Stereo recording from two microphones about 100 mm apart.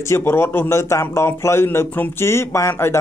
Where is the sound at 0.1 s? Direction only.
25° left (ahead or behind).